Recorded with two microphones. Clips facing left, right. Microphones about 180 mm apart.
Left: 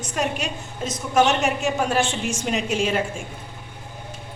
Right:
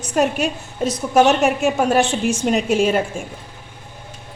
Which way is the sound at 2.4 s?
45° right (ahead or behind).